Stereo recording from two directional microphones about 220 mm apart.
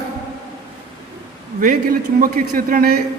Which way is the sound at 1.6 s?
40° right (ahead or behind).